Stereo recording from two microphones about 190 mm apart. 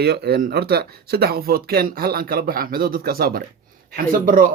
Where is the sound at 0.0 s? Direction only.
60° right (ahead or behind).